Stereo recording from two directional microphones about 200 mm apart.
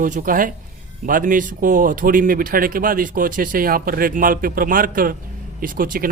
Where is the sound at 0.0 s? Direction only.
45° right (ahead or behind).